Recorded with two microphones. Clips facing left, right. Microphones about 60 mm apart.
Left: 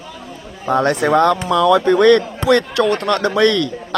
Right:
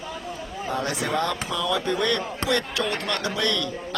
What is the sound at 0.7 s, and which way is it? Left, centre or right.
Speech, left.